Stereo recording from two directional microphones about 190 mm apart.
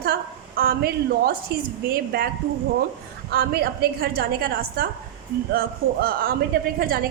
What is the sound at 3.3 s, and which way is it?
A woman's voice, 55° right (ahead or behind).